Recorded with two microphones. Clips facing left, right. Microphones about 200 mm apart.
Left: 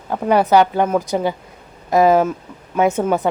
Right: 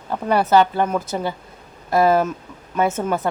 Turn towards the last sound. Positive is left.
turn(degrees=15)  # may be behind; listen again after turning